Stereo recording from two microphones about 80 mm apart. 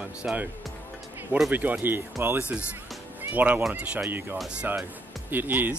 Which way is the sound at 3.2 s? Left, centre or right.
Right.